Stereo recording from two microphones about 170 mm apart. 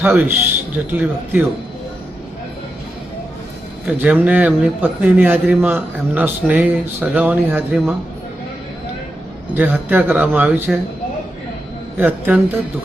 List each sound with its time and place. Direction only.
0.0 s speech: 10° right (ahead or behind)
3.8 s speech: 10° right (ahead or behind)
9.6 s speech: 10° right (ahead or behind)
11.9 s speech: 10° right (ahead or behind)